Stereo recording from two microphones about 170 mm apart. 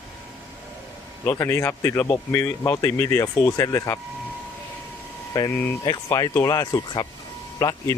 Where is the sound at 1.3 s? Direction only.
15° left (ahead or behind).